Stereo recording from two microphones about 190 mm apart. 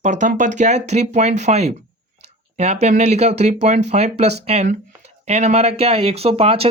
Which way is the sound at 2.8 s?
35° right (ahead or behind).